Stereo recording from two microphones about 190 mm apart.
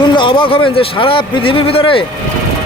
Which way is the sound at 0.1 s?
25° left (ahead or behind).